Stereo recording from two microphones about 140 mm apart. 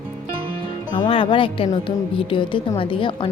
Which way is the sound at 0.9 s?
35° left (ahead or behind).